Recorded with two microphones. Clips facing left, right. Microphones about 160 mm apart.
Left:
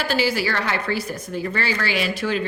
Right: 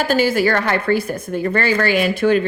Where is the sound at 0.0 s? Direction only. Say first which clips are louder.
Right 6 dB; 50° right (ahead or behind).